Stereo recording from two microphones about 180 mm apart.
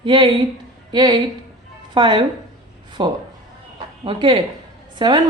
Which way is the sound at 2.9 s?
25° right (ahead or behind).